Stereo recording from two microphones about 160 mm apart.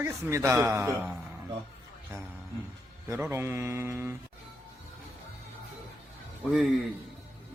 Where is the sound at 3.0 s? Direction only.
15° right (ahead or behind).